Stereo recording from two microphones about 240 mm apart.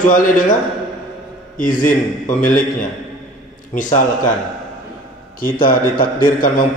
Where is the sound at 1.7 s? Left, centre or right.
Left.